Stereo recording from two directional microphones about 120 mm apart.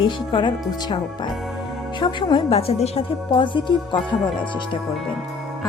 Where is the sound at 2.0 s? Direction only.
40° left (ahead or behind).